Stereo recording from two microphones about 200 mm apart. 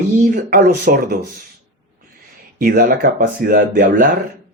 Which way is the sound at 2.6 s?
50° right (ahead or behind).